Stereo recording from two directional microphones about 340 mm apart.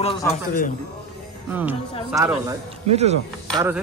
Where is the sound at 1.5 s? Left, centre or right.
Centre.